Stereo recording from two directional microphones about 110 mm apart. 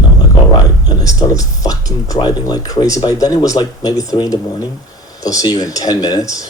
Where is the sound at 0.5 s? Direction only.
35° left (ahead or behind).